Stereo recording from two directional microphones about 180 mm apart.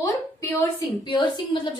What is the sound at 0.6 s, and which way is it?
A woman's voice, 25° left (ahead or behind).